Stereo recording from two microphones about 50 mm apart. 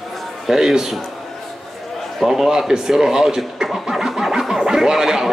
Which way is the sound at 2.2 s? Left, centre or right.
Centre.